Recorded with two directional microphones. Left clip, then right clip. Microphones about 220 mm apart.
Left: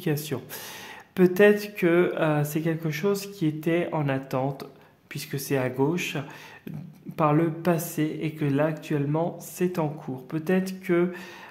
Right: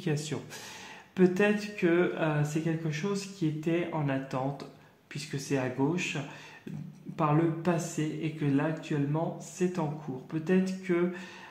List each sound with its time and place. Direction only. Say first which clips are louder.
0.0 s speech: left 5 dB; 35° left (ahead or behind)